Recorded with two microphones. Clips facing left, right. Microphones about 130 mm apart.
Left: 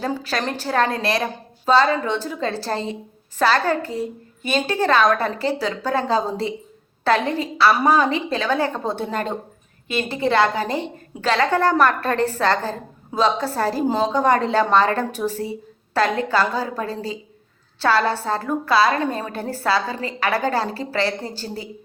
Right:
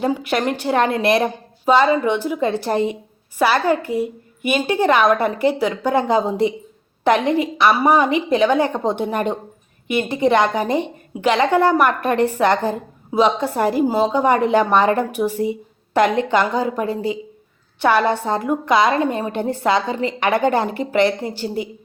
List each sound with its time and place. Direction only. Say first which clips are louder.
0.0 s a woman's voice: right 5 dB; 20° right (ahead or behind)